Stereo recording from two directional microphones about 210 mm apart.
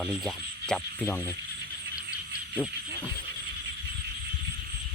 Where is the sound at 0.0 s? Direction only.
5° left (ahead or behind).